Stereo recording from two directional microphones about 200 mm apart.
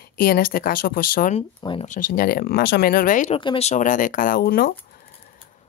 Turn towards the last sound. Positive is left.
turn(degrees=45)  # may be behind; listen again after turning